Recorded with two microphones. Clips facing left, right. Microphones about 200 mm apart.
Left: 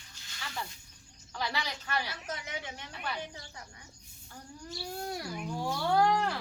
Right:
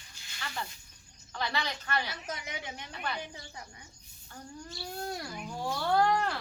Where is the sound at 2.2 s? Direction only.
15° right (ahead or behind).